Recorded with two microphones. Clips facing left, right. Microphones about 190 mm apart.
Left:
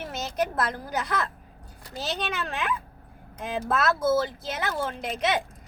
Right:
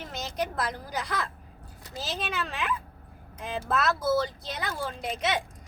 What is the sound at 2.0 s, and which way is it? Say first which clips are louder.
Speech: left 2 dB; centre (ahead or behind).